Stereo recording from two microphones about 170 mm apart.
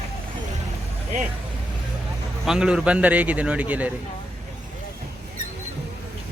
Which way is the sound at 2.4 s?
5° right (ahead or behind).